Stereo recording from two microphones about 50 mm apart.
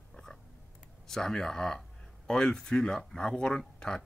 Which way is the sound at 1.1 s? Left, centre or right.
Centre.